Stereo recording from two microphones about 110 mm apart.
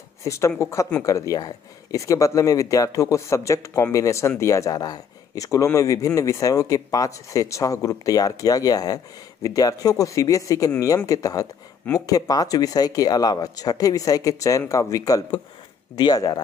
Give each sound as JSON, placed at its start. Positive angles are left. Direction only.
{"t": 0.2, "sound": "speech", "side_deg": 25}